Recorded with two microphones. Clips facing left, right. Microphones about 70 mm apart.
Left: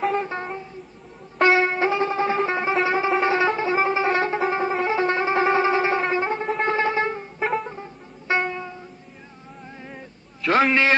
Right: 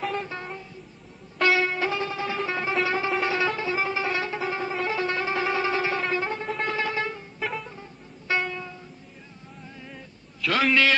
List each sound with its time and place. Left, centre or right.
0.2 s a sound: left
1.4 s music: left
4.8 s shofar: left
7.6 s music: left
9.8 s boat: left
10.7 s a man's voice: left